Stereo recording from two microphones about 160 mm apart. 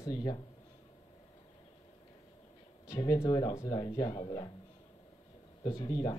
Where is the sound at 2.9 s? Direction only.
20° left (ahead or behind).